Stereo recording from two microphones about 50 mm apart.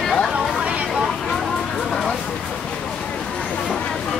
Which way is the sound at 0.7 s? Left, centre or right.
Right.